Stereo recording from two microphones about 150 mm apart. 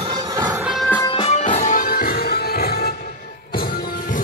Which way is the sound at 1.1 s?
40° left (ahead or behind).